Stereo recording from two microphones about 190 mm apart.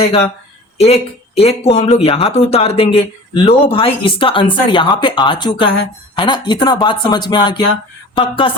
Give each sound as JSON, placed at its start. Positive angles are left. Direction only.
{"t": 0.8, "sound": "speech", "side_deg": 30}